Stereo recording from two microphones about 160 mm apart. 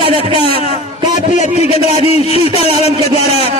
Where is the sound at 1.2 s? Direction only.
45° left (ahead or behind).